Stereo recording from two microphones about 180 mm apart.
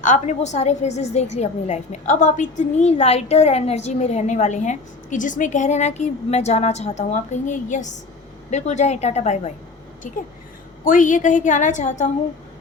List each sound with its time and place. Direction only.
0.0 s a woman's voice: 45° left (ahead or behind)
10.8 s a woman's voice: 45° left (ahead or behind)